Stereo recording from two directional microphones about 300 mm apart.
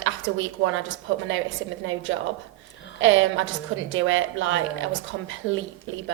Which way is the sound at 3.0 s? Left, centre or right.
Right.